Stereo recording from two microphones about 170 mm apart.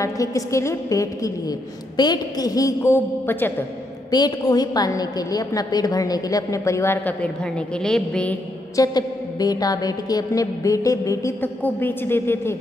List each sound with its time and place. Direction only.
0.0 s a woman's voice: 20° left (ahead or behind)
4.1 s a woman's voice: 25° left (ahead or behind); by 8.4 s 5° left (ahead or behind)
8.7 s a woman's voice: 20° left (ahead or behind)